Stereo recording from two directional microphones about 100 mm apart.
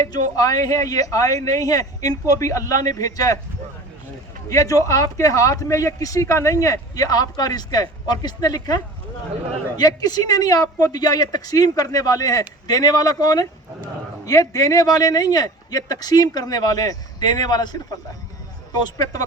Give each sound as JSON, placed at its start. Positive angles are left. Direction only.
{"t": 0.1, "sound": "speech", "side_deg": 40}
{"t": 4.4, "sound": "speech", "side_deg": 35}
{"t": 18.8, "sound": "speech", "side_deg": 40}